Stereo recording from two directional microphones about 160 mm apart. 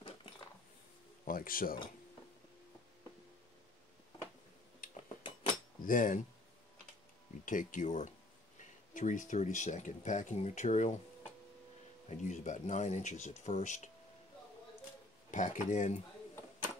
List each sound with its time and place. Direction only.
1.2 s speech: 60° left (ahead or behind)
5.9 s speech: 55° left (ahead or behind)
7.4 s speech: 55° left (ahead or behind)
12.1 s speech: 50° left (ahead or behind)
15.3 s speech: 50° left (ahead or behind)